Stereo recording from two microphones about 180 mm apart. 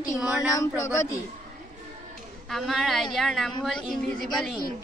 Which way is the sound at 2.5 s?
Centre (ahead or behind).